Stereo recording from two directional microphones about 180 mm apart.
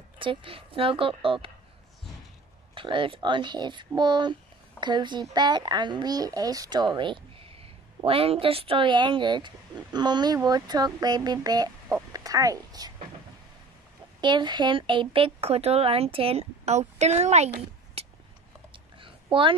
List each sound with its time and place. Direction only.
0.2 s speech: 30° right (ahead or behind)
2.7 s speech: 30° right (ahead or behind)
14.2 s speech: 25° right (ahead or behind)